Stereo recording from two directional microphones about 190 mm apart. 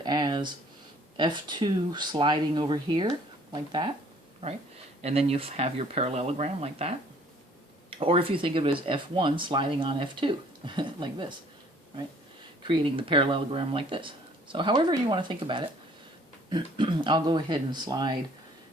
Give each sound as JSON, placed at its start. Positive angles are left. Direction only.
{"t": 0.0, "sound": "a sound", "side_deg": -20}
{"t": 1.1, "sound": "speech", "side_deg": -25}
{"t": 5.0, "sound": "speech", "side_deg": -35}
{"t": 12.6, "sound": "speech", "side_deg": -25}